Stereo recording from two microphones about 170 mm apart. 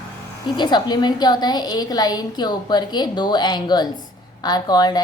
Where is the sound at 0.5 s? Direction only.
25° left (ahead or behind).